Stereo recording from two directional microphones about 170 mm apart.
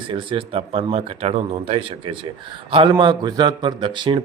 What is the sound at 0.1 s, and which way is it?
Speech, 30° right (ahead or behind).